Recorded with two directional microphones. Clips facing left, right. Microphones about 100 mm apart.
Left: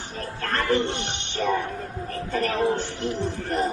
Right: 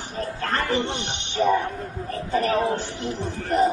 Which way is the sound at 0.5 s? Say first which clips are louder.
Left 2 dB; 15° right (ahead or behind).